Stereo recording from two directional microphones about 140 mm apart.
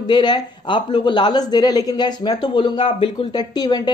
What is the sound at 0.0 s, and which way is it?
Speech, 30° left (ahead or behind).